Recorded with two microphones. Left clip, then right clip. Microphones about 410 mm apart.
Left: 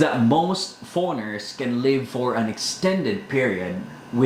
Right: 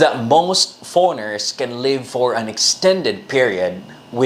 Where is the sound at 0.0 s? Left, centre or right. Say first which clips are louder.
Right 6 dB; right.